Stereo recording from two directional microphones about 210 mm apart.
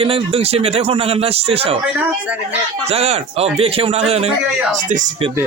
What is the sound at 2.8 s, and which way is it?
A man's voice, 30° right (ahead or behind).